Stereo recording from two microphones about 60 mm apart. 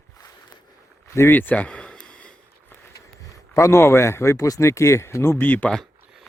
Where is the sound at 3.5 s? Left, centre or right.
Left.